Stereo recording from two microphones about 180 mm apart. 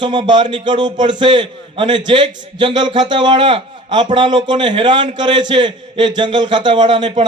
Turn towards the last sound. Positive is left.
turn(degrees=-25)  # may be behind; listen again after turning